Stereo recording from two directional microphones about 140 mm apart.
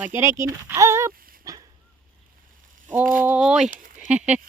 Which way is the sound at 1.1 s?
90° right.